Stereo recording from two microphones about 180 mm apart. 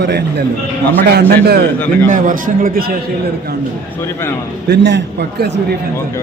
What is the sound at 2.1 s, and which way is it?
Speech, 45° right (ahead or behind).